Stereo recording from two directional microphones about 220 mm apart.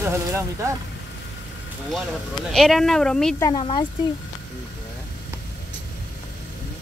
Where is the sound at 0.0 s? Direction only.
15° right (ahead or behind).